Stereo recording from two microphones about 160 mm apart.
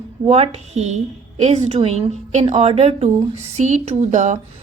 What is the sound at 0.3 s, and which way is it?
A woman's voice, 40° right (ahead or behind).